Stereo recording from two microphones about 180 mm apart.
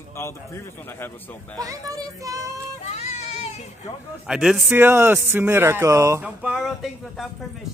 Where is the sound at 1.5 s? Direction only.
20° right (ahead or behind).